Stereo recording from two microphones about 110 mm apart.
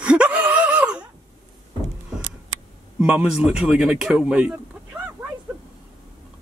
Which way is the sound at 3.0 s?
10° right (ahead or behind).